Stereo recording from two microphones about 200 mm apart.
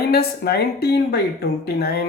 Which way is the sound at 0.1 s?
50° left (ahead or behind).